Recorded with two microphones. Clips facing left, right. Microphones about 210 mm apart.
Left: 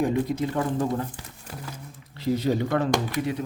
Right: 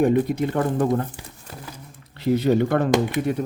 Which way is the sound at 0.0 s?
60° right (ahead or behind).